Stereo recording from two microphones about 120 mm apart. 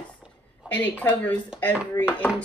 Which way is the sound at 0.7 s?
10° left (ahead or behind).